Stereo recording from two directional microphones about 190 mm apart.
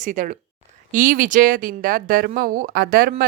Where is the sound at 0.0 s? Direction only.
45° right (ahead or behind).